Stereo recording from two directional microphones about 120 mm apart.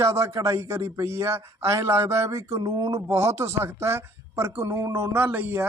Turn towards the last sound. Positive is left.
turn(degrees=-20)  # may be behind; listen again after turning